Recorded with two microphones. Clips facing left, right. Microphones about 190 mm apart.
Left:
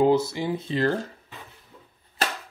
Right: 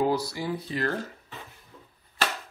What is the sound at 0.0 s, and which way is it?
Speech, 25° left (ahead or behind).